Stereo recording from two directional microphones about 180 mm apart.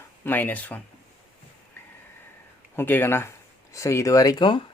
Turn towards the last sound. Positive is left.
turn(degrees=25)  # may be behind; listen again after turning